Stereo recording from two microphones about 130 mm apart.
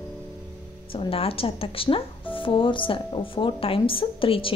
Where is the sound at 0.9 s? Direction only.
45° left (ahead or behind).